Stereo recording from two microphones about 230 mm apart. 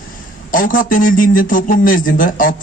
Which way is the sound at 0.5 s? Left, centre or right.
Left.